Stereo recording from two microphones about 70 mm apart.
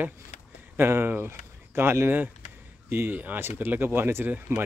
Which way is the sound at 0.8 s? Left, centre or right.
Right.